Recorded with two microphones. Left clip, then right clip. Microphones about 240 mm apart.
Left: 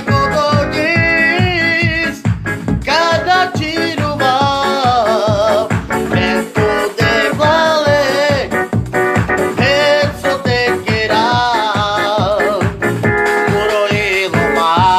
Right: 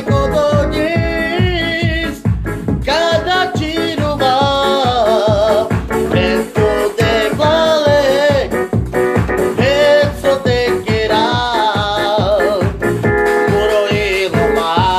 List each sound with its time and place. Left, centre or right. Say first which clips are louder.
0.1 s music: left 1 dB; left
2.9 s music: left 2 dB; left